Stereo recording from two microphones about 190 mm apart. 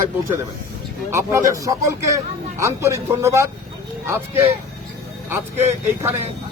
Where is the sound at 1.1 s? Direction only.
15° right (ahead or behind).